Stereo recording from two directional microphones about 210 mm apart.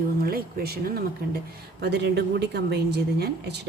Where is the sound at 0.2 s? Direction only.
45° right (ahead or behind).